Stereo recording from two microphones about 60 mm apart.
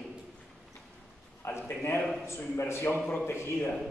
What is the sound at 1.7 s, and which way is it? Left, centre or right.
Speech, left.